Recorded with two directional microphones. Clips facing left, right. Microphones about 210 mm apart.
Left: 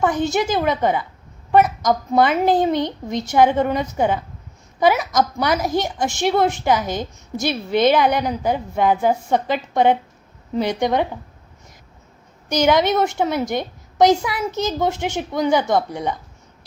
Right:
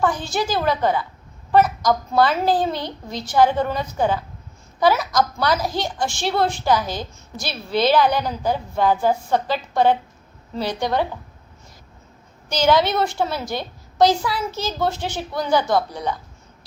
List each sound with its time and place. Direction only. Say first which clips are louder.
0.0 s a woman's voice: left 3 dB; 20° left (ahead or behind)
12.5 s a woman's voice: left 1 dB; 20° left (ahead or behind)
13.5 s a sound: left 4 dB; 20° left (ahead or behind)
14.2 s a woman's voice: left 2 dB; 20° left (ahead or behind)